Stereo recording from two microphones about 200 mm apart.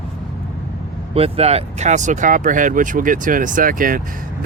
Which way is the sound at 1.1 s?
30° right (ahead or behind).